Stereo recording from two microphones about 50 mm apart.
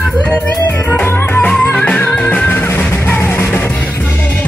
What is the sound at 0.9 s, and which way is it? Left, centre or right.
Music, left.